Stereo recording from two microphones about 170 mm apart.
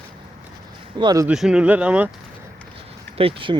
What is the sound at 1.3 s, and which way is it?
Speech, 5° right (ahead or behind).